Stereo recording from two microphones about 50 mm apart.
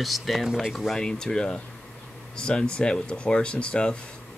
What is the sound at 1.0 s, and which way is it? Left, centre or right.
Speech, centre.